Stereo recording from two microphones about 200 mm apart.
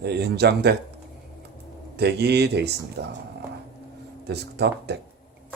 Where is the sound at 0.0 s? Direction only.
55° right (ahead or behind).